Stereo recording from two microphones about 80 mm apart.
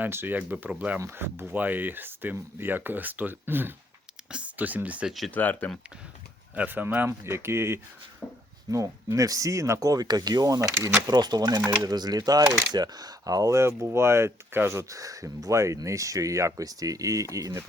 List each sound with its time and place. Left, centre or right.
0.0 s speech: right
0.9 s speech: right
5.0 s speech: centre
5.3 s speech: left
6.6 s speech: right
7.1 s speech: right
8.2 s a sound: centre
8.7 s speech: right
11.0 s speech: right
12.4 s speech: right
12.7 s speech: right